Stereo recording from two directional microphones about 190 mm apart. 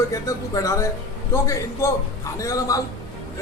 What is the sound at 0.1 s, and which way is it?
A man's voice, 15° left (ahead or behind).